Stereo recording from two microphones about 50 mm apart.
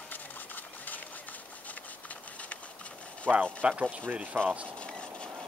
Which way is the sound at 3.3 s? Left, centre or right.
Right.